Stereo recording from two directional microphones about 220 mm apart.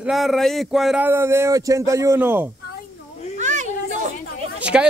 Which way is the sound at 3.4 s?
35° right (ahead or behind).